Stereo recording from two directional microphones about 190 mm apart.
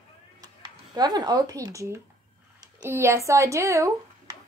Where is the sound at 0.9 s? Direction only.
20° right (ahead or behind).